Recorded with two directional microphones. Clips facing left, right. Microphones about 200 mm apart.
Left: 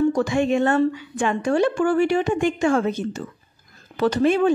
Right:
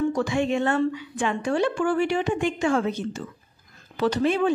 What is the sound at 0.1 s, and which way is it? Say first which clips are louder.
A woman's voice: left 4 dB; 45° left (ahead or behind).